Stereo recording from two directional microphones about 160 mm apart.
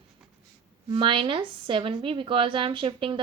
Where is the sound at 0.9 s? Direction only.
30° right (ahead or behind).